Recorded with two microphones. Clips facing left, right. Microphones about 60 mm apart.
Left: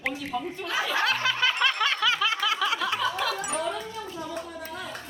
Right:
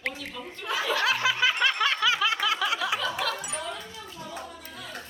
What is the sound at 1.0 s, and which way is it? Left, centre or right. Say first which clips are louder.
Snicker: right 1 dB; centre.